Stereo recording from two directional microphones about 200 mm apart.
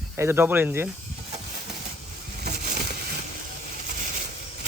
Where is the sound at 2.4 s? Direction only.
50° right (ahead or behind).